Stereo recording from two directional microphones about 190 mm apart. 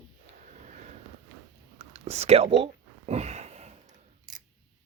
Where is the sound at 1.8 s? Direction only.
35° right (ahead or behind).